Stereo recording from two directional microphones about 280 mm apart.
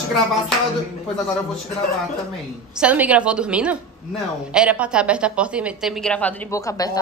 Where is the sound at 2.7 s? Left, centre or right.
Centre.